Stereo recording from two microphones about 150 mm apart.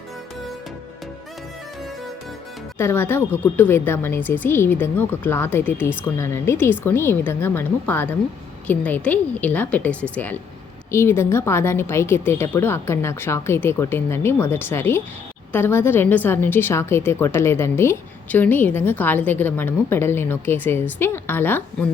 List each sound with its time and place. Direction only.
2.7 s a woman's voice: 15° left (ahead or behind)